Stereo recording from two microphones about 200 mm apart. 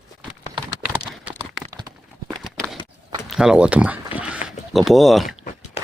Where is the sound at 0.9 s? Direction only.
5° right (ahead or behind).